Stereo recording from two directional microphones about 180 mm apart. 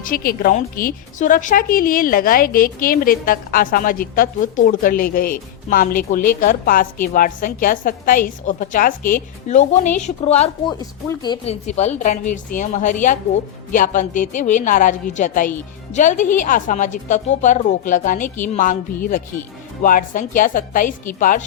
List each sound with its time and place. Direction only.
0.0 s a woman's voice: 55° left (ahead or behind); by 10.8 s 35° left (ahead or behind)
10.8 s speech: 20° left (ahead or behind)
11.4 s a woman's voice: 40° left (ahead or behind)
19.8 s a woman's voice: 50° left (ahead or behind)